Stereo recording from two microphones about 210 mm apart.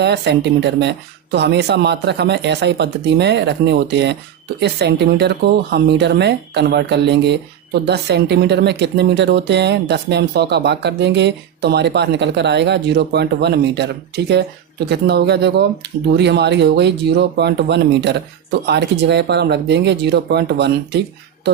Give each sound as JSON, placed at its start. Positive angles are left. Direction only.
{"t": 0.0, "sound": "speech", "side_deg": -55}